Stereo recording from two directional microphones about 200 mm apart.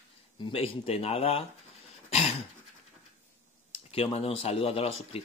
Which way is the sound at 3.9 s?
30° left (ahead or behind).